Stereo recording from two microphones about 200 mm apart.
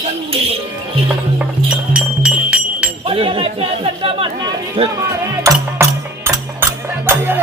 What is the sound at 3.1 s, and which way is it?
Chatter, 25° right (ahead or behind).